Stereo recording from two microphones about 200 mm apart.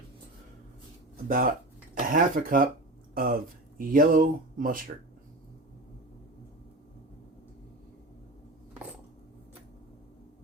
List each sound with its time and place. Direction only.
1.1 s speech: 45° right (ahead or behind)